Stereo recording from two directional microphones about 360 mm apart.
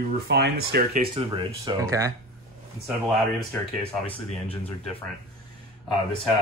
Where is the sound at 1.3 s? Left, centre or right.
Centre.